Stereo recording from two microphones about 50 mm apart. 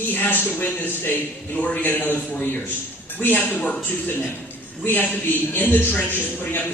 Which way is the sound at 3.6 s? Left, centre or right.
Left.